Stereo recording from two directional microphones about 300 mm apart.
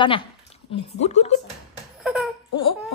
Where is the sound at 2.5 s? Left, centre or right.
Centre.